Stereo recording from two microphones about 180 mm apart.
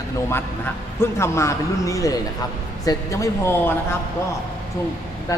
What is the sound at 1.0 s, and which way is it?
Speech, 15° left (ahead or behind).